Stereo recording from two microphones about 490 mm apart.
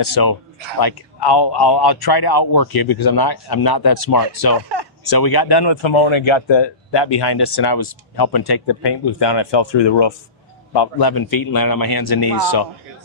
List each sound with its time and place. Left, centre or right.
0.0 s speech: left
4.5 s a sound: right
5.1 s speech: left
10.7 s speech: left